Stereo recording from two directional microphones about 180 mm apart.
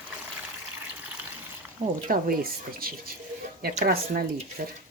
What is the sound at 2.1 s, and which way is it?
Speech, 55° right (ahead or behind).